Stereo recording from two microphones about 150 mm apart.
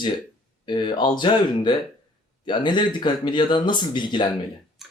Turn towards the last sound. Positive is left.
turn(degrees=30)  # may be behind; listen again after turning